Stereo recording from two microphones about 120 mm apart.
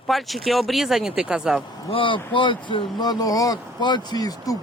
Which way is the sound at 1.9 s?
45° left (ahead or behind).